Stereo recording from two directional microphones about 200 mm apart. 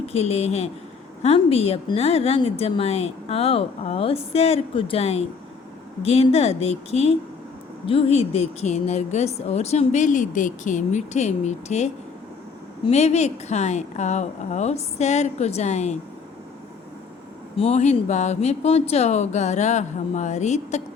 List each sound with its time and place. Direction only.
0.0 s a woman's voice: 30° left (ahead or behind)
17.6 s a woman's voice: 35° left (ahead or behind)